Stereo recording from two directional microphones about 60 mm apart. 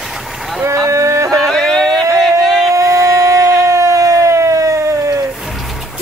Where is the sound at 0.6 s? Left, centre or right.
Right.